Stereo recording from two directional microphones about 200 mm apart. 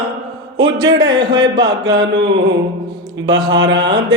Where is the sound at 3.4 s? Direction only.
25° right (ahead or behind).